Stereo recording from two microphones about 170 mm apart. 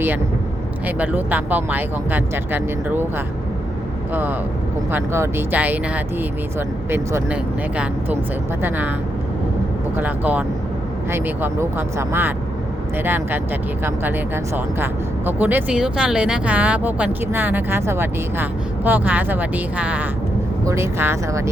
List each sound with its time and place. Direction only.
0.9 s speech: 10° right (ahead or behind)
4.1 s speech: 10° right (ahead or behind)
8.6 s speech: 10° right (ahead or behind)
10.0 s speech: 10° right (ahead or behind)
15.3 s speech: 10° right (ahead or behind)